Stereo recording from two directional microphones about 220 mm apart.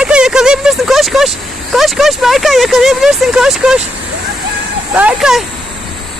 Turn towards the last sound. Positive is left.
turn(degrees=0)  # may be behind; listen again after turning